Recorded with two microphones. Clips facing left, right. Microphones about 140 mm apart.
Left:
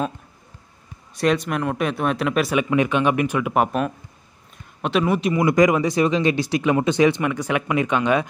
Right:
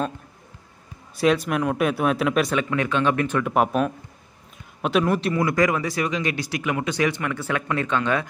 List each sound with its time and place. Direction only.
1.1 s speech: centre (ahead or behind)
2.5 s speech: 15° left (ahead or behind)
3.5 s speech: centre (ahead or behind)
5.3 s speech: 20° left (ahead or behind)